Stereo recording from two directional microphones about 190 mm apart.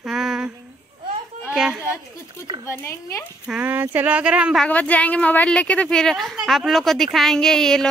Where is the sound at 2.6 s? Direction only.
15° left (ahead or behind).